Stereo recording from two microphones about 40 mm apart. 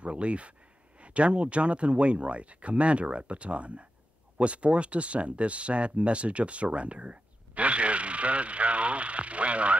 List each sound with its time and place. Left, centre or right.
0.0 s speech: right